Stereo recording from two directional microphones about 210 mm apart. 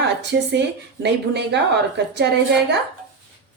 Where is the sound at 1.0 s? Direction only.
55° right (ahead or behind).